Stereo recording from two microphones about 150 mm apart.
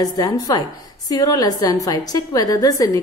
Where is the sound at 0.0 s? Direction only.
25° left (ahead or behind).